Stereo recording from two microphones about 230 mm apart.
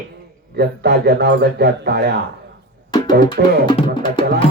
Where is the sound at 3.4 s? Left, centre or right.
Right.